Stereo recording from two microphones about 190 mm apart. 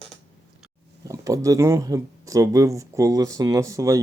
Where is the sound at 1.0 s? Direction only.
15° right (ahead or behind).